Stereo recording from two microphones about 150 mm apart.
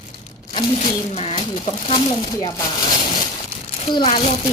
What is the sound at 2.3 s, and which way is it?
Speech, 25° left (ahead or behind).